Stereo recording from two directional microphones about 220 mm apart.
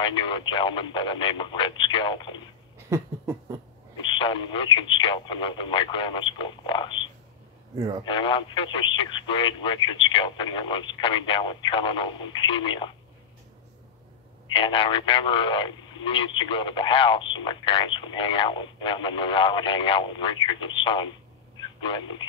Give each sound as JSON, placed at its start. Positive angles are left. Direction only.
{"t": 0.0, "sound": "speech", "side_deg": 20}
{"t": 2.9, "sound": "laughter", "side_deg": -15}
{"t": 4.1, "sound": "speech", "side_deg": 20}
{"t": 8.0, "sound": "speech", "side_deg": 20}
{"t": 14.5, "sound": "speech", "side_deg": 25}